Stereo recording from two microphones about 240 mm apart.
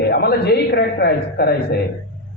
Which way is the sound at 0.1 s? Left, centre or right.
Left.